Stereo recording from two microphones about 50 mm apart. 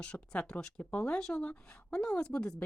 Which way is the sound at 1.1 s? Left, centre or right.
Centre.